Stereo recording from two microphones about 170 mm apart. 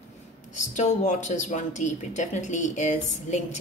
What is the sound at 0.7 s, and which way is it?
Speech, 45° left (ahead or behind).